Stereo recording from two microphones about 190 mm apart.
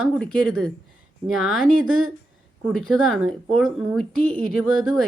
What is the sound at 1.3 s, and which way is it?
Speech, 90° right.